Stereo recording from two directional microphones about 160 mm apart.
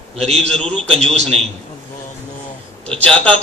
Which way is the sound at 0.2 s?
40° right (ahead or behind).